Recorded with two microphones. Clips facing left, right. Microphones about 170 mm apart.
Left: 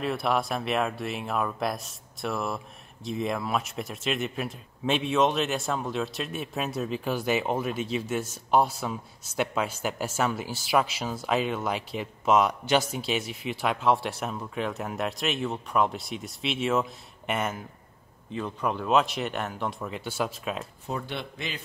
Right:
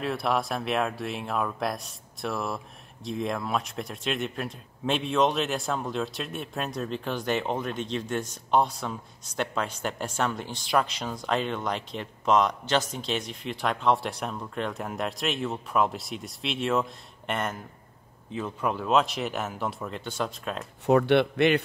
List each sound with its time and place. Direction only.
0.0 s speech: centre (ahead or behind)
20.8 s a man's voice: 70° right (ahead or behind)